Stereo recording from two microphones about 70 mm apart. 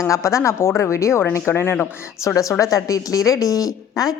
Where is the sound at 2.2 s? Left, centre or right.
Left.